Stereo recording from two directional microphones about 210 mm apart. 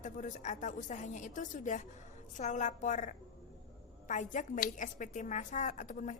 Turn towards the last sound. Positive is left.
turn(degrees=35)  # may be behind; listen again after turning